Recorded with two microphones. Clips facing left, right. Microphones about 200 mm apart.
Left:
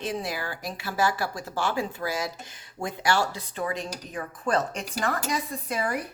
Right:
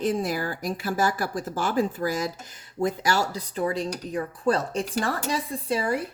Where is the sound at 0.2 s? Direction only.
45° right (ahead or behind).